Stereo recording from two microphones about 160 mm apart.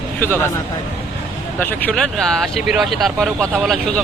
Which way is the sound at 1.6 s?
10° left (ahead or behind).